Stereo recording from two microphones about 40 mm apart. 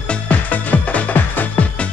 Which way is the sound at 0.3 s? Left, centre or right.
Left.